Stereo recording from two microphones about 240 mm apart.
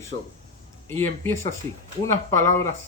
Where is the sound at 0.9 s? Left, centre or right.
Centre.